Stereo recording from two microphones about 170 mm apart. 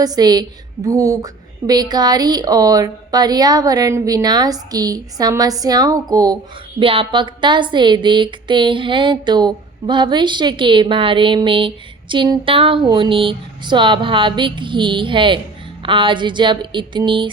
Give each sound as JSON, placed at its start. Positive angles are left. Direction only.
{"t": 0.0, "sound": "speech", "side_deg": -25}